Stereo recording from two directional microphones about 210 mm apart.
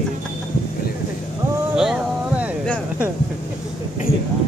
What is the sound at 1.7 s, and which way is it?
Boat, 5° right (ahead or behind).